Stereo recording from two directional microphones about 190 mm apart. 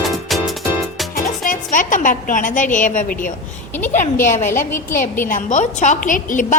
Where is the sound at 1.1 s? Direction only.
45° left (ahead or behind).